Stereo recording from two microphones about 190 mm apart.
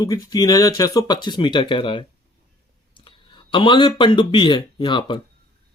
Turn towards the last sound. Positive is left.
turn(degrees=25)  # may be behind; listen again after turning